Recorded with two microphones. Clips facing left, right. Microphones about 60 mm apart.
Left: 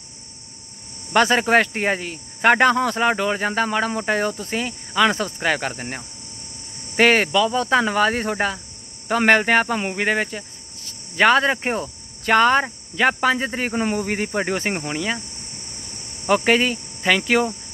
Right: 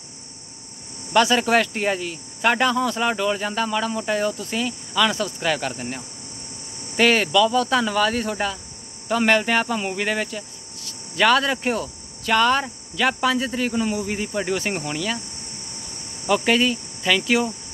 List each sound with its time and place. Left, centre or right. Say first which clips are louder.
1.1 s speech: left 1 dB; left
16.3 s speech: left 1 dB; left